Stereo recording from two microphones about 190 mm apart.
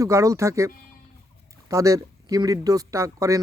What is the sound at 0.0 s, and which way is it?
Speech, 15° right (ahead or behind).